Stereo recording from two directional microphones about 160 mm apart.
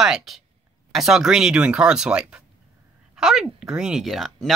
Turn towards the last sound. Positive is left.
turn(degrees=0)  # may be behind; listen again after turning